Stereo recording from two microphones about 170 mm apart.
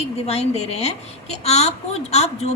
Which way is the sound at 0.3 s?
40° left (ahead or behind).